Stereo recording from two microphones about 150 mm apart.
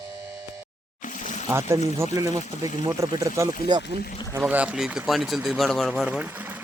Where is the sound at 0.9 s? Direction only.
60° left (ahead or behind).